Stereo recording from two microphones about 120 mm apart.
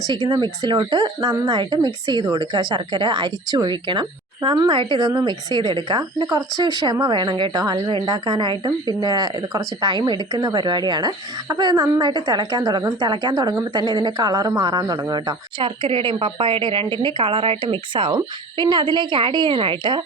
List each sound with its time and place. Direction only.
0.3 s a woman's voice: 40° right (ahead or behind)